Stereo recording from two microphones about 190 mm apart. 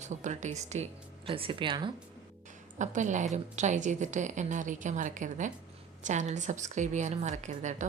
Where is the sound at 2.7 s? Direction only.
40° right (ahead or behind).